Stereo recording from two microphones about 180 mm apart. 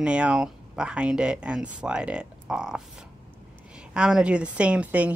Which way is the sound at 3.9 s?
5° right (ahead or behind).